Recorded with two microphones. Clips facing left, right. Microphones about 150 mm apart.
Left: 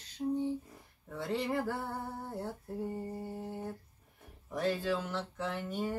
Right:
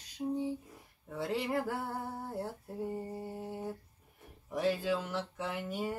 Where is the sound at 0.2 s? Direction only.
20° right (ahead or behind).